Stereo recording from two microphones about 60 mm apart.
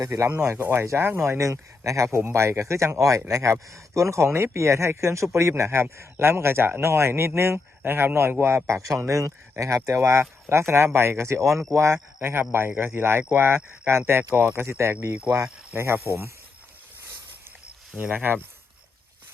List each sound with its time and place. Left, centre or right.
0.0 s speech: right
0.5 s a man's voice: right
2.1 s a man's voice: right
12.2 s a man's voice: right
15.1 s speech: right
15.7 s speech: right
18.1 s speech: right